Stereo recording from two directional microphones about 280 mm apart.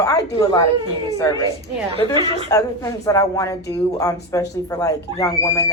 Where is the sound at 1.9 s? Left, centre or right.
Centre.